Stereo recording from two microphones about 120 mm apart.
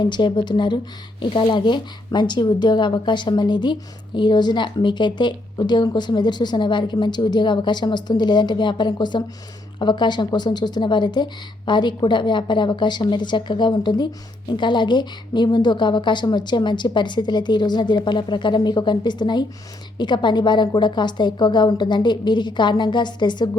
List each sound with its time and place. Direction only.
0.0 s speech: 40° left (ahead or behind)